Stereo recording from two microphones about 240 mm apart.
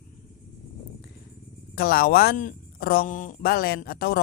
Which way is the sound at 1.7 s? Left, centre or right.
Left.